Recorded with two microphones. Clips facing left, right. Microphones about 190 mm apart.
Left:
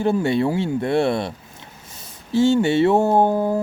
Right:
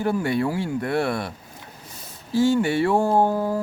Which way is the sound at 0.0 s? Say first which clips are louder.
Left 4 dB; 25° left (ahead or behind).